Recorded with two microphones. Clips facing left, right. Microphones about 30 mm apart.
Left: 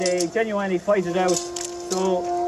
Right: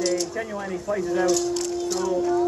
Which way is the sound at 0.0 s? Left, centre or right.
Centre.